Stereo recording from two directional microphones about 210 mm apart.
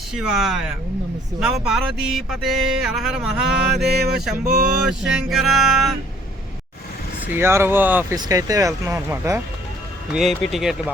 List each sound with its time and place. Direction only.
0.1 s speech: 5° right (ahead or behind)
3.8 s a sound: 50° right (ahead or behind)
4.9 s speech: 5° right (ahead or behind)
7.3 s speech: 10° right (ahead or behind)
10.1 s speech: centre (ahead or behind)